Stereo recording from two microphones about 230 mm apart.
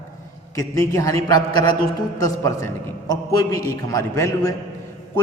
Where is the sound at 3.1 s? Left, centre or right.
Centre.